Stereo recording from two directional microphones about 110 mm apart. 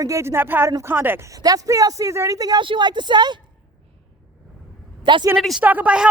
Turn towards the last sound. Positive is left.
turn(degrees=-10)  # may be behind; listen again after turning